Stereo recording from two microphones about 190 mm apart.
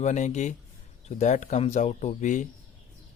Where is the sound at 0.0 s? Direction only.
40° left (ahead or behind).